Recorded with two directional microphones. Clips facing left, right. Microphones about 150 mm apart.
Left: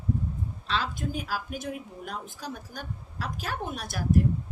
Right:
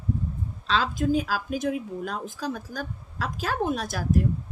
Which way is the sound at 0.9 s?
90° right.